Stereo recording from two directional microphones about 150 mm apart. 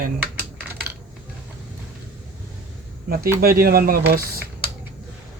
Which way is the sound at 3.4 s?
85° right.